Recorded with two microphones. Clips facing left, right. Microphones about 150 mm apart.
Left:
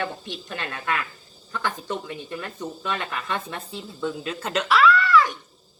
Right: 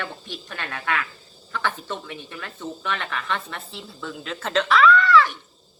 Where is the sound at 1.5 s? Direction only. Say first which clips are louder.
Even; 15° left (ahead or behind).